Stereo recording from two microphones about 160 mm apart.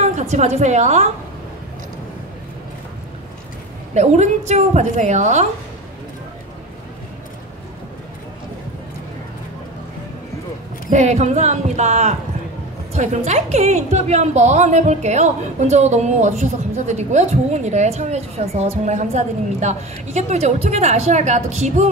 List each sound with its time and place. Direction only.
0.0 s a woman's voice: 45° right (ahead or behind)
3.9 s a woman's voice: 45° right (ahead or behind)
10.9 s a woman's voice: 45° right (ahead or behind)